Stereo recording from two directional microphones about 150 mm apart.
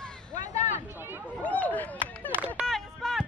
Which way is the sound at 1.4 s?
10° left (ahead or behind).